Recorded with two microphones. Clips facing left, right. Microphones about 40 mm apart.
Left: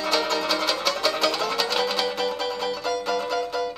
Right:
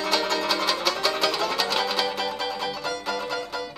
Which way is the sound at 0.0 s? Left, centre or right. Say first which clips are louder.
Left 1 dB; centre.